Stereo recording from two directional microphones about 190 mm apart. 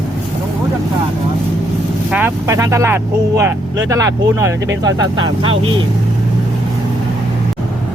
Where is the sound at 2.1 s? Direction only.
10° right (ahead or behind).